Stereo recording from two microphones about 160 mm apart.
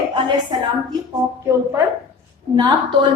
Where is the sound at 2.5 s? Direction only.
30° right (ahead or behind).